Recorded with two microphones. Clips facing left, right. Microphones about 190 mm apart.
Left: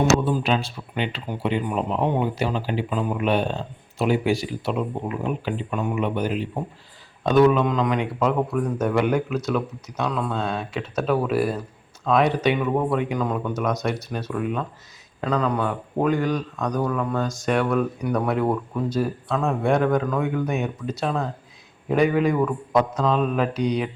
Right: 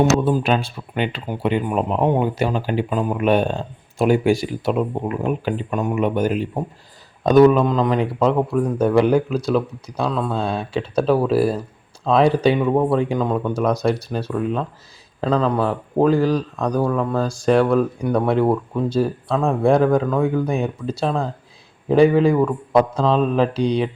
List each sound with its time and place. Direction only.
0.3 s speech: 50° right (ahead or behind); by 23.9 s 30° right (ahead or behind)